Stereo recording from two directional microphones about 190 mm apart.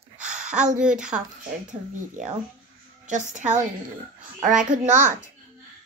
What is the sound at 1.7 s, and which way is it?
Speech, 40° right (ahead or behind).